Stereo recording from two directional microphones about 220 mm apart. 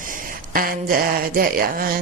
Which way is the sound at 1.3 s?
40° right (ahead or behind).